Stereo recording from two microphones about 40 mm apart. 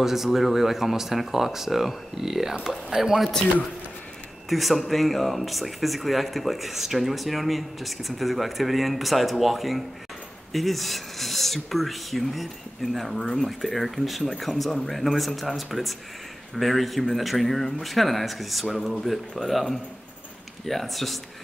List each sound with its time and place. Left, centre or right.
0.0 s speech: centre
4.5 s speech: centre